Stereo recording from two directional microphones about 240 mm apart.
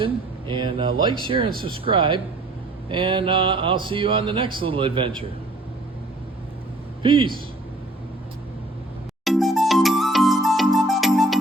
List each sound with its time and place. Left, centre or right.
0.0 s speech: centre
7.0 s a man's voice: right
9.2 s music: centre